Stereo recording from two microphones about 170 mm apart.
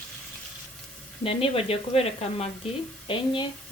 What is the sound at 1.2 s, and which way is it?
A woman's voice, 35° left (ahead or behind).